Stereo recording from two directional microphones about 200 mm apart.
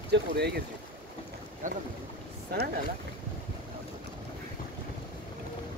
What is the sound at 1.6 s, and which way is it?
Speech, 40° right (ahead or behind).